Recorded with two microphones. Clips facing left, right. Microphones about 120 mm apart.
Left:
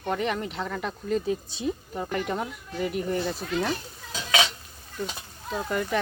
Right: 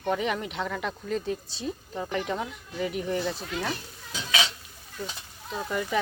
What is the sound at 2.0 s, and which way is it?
Speech, centre (ahead or behind).